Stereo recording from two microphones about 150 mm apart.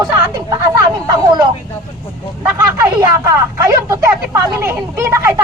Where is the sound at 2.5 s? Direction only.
20° right (ahead or behind).